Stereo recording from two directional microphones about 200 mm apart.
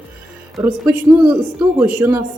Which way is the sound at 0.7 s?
5° right (ahead or behind).